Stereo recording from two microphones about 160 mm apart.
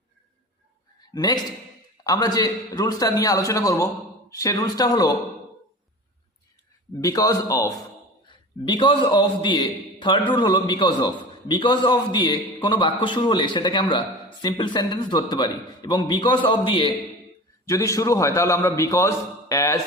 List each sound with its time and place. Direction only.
1.1 s a man's voice: 25° left (ahead or behind)
7.0 s a man's voice: 20° left (ahead or behind)
8.3 s a man's voice: 30° left (ahead or behind)
17.7 s a man's voice: 20° left (ahead or behind)